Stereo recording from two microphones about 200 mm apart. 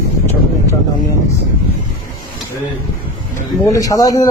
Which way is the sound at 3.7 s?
15° left (ahead or behind).